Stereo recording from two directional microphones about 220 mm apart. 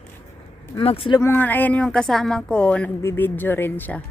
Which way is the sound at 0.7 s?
25° left (ahead or behind).